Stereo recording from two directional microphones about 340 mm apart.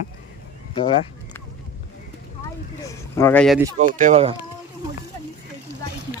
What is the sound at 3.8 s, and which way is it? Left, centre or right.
Speech, right.